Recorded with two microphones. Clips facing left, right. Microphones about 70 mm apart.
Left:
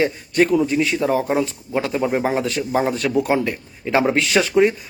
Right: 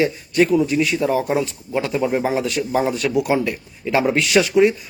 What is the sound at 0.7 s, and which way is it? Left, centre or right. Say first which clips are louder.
Speech: even; left.